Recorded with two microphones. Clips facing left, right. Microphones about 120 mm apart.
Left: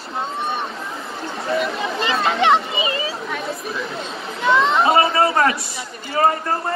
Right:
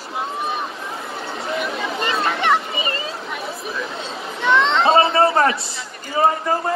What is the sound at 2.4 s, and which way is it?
Speech, 15° left (ahead or behind).